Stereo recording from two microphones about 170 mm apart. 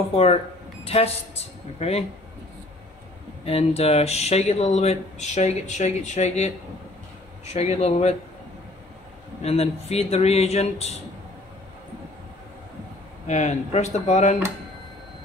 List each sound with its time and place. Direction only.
0.1 s speech: 35° left (ahead or behind)
3.4 s speech: 35° left (ahead or behind)
9.4 s speech: 35° left (ahead or behind)
13.3 s speech: 40° left (ahead or behind)